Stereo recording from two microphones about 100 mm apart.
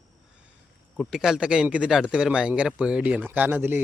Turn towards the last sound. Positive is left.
turn(degrees=-20)  # may be behind; listen again after turning